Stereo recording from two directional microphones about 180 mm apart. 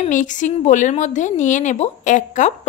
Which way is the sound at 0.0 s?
45° left (ahead or behind).